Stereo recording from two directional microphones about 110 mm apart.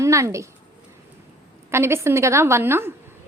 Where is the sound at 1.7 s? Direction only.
25° right (ahead or behind).